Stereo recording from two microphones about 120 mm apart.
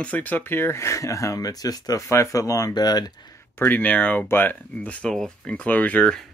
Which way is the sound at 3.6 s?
15° left (ahead or behind).